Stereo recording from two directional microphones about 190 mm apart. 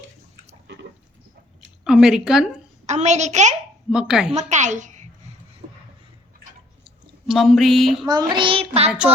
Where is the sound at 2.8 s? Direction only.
35° right (ahead or behind).